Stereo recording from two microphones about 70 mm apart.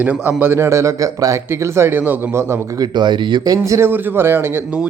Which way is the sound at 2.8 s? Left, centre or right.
Right.